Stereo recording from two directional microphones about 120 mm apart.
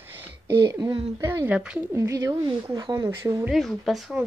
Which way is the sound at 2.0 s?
25° right (ahead or behind).